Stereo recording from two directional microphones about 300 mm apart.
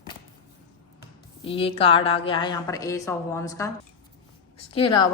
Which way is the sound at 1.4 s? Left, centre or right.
Centre.